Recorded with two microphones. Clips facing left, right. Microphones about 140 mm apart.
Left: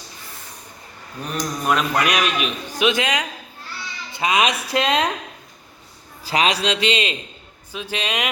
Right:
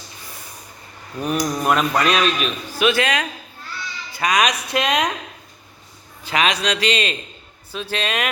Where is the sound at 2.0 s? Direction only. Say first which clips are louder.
Right 2 dB; 15° left (ahead or behind).